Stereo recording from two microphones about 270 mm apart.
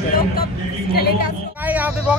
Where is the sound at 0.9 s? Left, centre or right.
Left.